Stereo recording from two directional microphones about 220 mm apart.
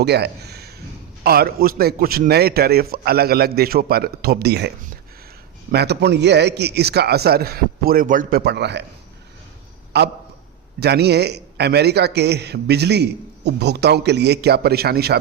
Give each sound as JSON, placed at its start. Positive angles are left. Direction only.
{"t": 0.0, "sound": "a sound", "side_deg": -50}
{"t": 1.2, "sound": "a man's voice", "side_deg": -45}
{"t": 5.7, "sound": "a man's voice", "side_deg": -50}
{"t": 9.9, "sound": "a man's voice", "side_deg": -50}